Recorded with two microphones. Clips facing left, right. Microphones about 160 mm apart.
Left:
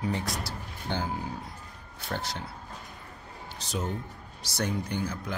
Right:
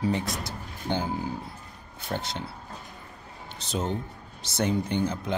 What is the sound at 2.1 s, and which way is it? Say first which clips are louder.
Speech: right 2 dB; 20° right (ahead or behind).